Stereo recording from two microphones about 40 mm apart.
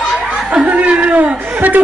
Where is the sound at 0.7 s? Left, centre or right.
Right.